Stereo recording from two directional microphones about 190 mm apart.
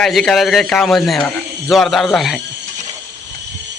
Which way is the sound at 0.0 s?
Centre (ahead or behind).